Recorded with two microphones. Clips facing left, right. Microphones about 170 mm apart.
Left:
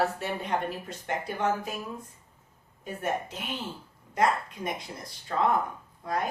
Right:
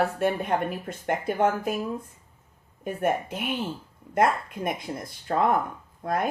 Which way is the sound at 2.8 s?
55° right (ahead or behind).